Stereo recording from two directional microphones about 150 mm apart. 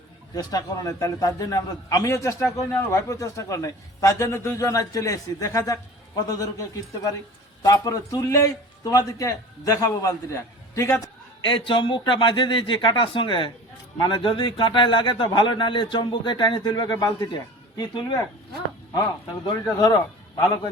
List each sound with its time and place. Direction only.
0.3 s a man's voice: 25° left (ahead or behind)
11.4 s a man's voice: 35° left (ahead or behind)